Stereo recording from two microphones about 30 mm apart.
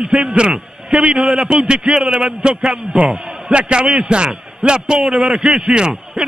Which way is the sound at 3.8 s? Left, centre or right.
Right.